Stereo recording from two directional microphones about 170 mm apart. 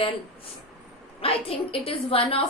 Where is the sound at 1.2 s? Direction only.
35° left (ahead or behind).